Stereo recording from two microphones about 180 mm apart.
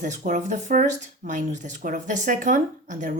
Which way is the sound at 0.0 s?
45° right (ahead or behind).